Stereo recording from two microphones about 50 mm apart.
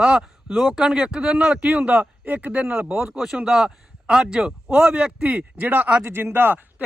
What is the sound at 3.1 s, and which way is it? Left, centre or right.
A man's voice, centre.